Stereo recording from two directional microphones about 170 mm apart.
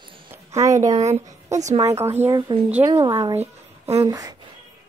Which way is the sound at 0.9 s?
40° right (ahead or behind).